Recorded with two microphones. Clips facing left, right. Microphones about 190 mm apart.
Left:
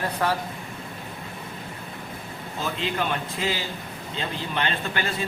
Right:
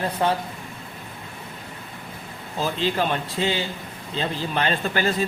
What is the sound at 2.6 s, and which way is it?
A man's voice, 35° right (ahead or behind).